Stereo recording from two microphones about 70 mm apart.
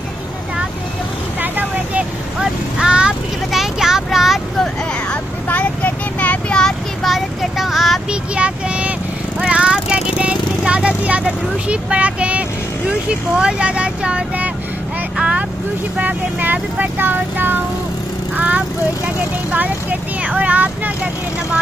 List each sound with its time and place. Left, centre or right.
2.4 s vehicle: centre
5.1 s vehicle: left
6.5 s a sound: centre
7.1 s vehicle: centre
8.1 s vehicle: centre
13.4 s speech: centre
15.1 s vehicle: centre
16.0 s speech: right